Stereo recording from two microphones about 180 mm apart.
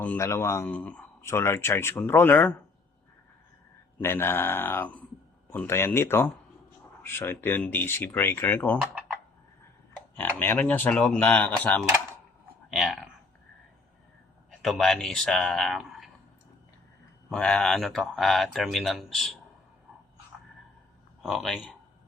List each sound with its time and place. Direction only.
0.0 s speech: 10° left (ahead or behind)
3.9 s speech: 10° left (ahead or behind)
10.2 s speech: 10° left (ahead or behind)
14.6 s speech: centre (ahead or behind)
17.2 s speech: 5° left (ahead or behind)
21.2 s speech: centre (ahead or behind)